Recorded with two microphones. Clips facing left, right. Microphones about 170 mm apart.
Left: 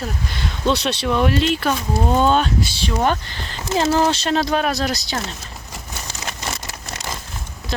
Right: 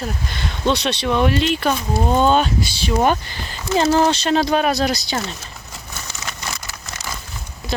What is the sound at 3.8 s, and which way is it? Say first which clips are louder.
Speech: right 1 dB; centre (ahead or behind).